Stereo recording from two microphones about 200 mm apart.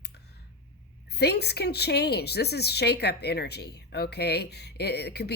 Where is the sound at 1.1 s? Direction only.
55° left (ahead or behind).